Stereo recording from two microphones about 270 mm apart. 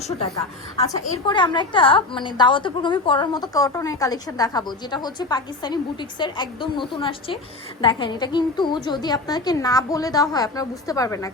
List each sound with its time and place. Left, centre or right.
1.3 s a woman's voice: centre